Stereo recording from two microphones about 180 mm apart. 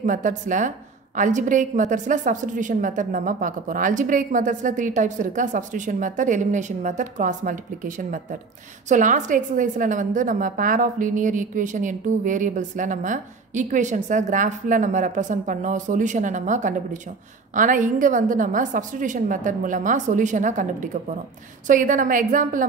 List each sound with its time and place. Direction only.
0.0 s a woman's voice: 45° right (ahead or behind)